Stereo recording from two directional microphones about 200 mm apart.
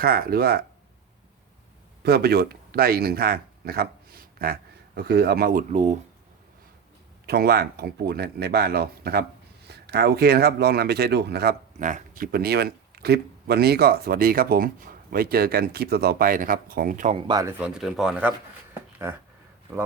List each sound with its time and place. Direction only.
0.0 s speech: 50° right (ahead or behind)
2.0 s speech: 55° right (ahead or behind); by 6.0 s 35° right (ahead or behind)
7.3 s speech: 50° right (ahead or behind)
17.2 s speech: 20° right (ahead or behind)
17.6 s speech: centre (ahead or behind)